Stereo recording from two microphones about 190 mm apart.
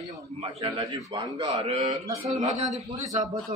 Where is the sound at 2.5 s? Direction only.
35° right (ahead or behind).